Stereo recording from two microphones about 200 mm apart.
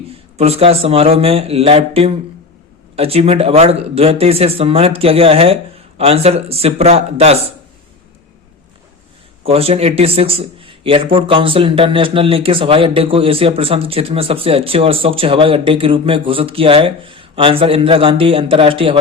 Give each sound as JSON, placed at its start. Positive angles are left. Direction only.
{"t": 0.3, "sound": "speech", "side_deg": -30}
{"t": 9.5, "sound": "speech", "side_deg": -30}